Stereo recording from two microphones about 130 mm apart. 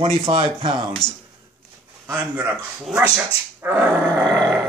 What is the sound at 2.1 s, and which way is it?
Speech, 10° right (ahead or behind).